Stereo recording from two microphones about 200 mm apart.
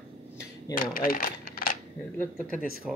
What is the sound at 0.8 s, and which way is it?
Speech, 45° left (ahead or behind).